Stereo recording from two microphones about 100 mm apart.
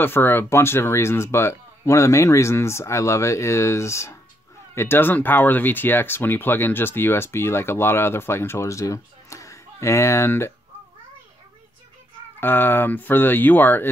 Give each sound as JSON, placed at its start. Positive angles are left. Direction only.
{"t": 0.0, "sound": "speech", "side_deg": 20}
{"t": 12.4, "sound": "speech", "side_deg": 20}